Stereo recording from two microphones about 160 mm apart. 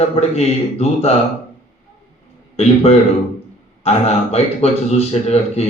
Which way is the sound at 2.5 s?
40° left (ahead or behind).